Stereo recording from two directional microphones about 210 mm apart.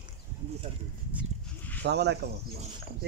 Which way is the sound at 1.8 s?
55° right (ahead or behind).